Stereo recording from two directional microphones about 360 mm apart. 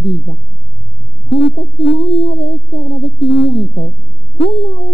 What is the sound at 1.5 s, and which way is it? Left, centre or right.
Speech, left.